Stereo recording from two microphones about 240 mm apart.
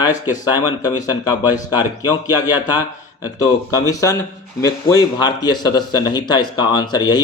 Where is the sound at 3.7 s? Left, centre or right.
Centre.